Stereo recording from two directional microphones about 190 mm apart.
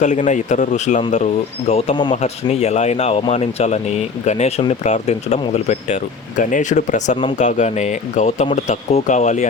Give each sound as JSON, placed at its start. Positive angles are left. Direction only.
{"t": 0.0, "sound": "speech", "side_deg": 40}